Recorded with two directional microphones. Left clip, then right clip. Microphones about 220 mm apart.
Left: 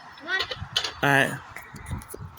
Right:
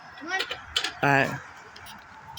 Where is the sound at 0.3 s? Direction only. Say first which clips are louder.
Left 2 dB; 45° right (ahead or behind).